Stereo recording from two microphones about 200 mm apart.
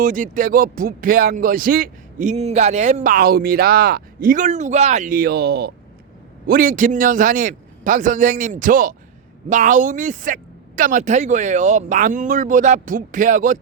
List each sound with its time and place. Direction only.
0.0 s speech: 40° right (ahead or behind)